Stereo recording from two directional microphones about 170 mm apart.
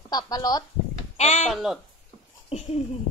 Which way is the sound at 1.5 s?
Centre (ahead or behind).